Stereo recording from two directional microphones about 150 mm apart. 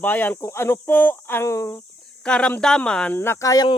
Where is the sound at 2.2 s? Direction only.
5° left (ahead or behind); by 3.7 s 25° left (ahead or behind).